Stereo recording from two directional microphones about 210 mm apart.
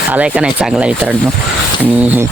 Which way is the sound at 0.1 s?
5° right (ahead or behind).